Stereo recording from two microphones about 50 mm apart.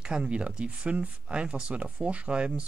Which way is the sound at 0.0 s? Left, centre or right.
Centre.